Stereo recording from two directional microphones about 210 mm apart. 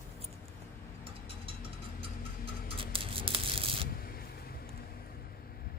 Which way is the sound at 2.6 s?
25° right (ahead or behind).